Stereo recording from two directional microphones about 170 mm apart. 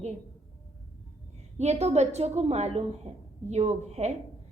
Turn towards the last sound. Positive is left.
turn(degrees=-40)  # may be behind; listen again after turning